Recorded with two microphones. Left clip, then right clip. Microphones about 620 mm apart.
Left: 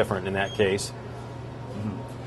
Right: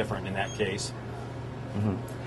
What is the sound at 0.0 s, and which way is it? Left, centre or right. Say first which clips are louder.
Speech: left 6 dB; left.